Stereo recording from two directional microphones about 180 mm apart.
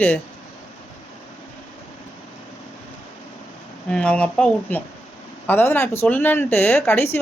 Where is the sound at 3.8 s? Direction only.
5° left (ahead or behind).